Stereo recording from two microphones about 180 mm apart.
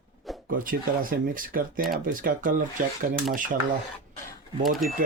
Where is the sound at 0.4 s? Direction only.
50° right (ahead or behind).